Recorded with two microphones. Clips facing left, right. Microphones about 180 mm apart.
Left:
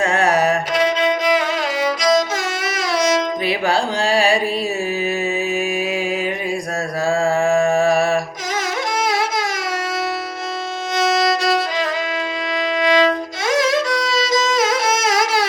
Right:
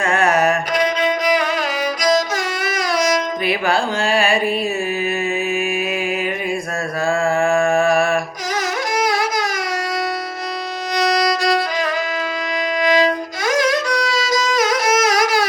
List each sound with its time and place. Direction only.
0.0 s music: 35° left (ahead or behind)
0.8 s violin: 25° left (ahead or behind)
2.6 s music: 25° left (ahead or behind)
4.0 s carnatic music: 35° left (ahead or behind)
5.5 s music: 35° left (ahead or behind)
7.1 s mantra: 35° left (ahead or behind)
7.8 s music: 35° left (ahead or behind)
10.9 s violin: 25° left (ahead or behind)